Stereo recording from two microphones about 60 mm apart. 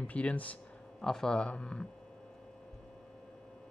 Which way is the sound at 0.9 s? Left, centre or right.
Centre.